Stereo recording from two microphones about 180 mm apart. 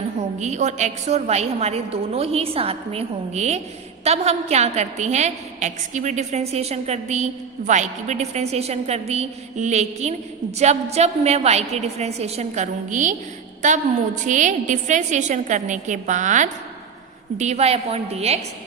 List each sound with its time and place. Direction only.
0.2 s a woman's voice: 40° right (ahead or behind)